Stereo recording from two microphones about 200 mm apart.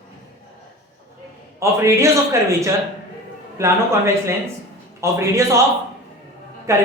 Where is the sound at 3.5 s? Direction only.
15° right (ahead or behind).